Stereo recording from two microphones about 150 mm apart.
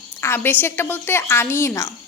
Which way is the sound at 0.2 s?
15° left (ahead or behind).